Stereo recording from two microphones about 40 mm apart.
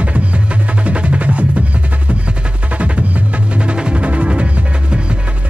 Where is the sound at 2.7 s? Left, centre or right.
Right.